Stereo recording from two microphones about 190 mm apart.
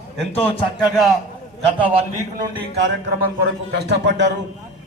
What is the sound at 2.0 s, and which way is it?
Speech, 25° right (ahead or behind).